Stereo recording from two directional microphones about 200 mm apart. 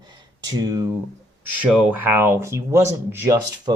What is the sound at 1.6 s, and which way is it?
Speech, 5° right (ahead or behind).